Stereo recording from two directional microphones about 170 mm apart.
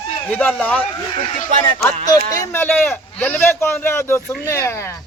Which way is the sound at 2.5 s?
10° left (ahead or behind).